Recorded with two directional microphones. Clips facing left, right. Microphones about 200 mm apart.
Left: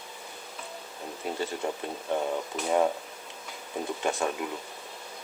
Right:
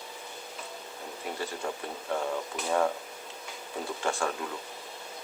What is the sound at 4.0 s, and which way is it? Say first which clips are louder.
Speech: left 1 dB; 20° left (ahead or behind).